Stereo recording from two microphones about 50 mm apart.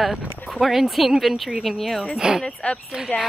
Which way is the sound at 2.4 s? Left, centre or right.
Centre.